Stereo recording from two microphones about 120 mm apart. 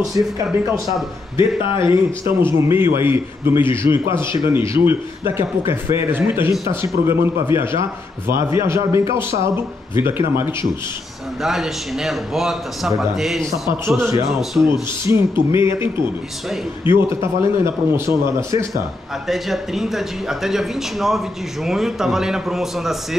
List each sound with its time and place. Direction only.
0.2 s a man's voice: 30° right (ahead or behind)
1.3 s speech: 45° left (ahead or behind)
2.2 s a man's voice: 20° right (ahead or behind)
11.4 s a man's voice: 5° right (ahead or behind)
13.8 s a man's voice: 25° right (ahead or behind)
14.2 s a man's voice: centre (ahead or behind)
14.7 s a man's voice: 20° right (ahead or behind)
16.9 s a man's voice: 20° right (ahead or behind)
19.2 s a man's voice: centre (ahead or behind)